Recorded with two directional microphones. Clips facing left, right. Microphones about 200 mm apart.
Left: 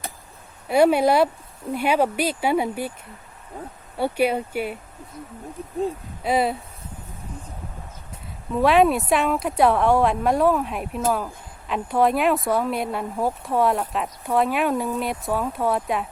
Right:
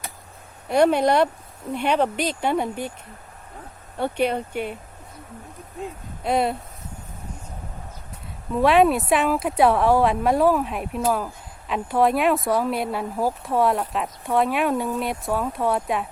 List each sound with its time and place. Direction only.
0.7 s speech: 5° left (ahead or behind)
3.9 s speech: 5° left (ahead or behind)
6.2 s speech: centre (ahead or behind)
8.5 s speech: centre (ahead or behind)